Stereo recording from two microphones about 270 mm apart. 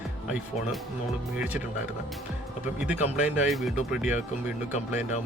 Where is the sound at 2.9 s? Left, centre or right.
Left.